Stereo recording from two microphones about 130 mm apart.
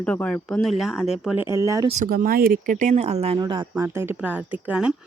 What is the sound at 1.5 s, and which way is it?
Speech, 25° right (ahead or behind).